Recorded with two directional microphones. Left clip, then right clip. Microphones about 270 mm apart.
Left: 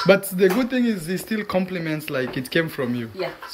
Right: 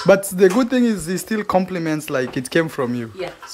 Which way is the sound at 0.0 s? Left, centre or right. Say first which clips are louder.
Right 3 dB; centre.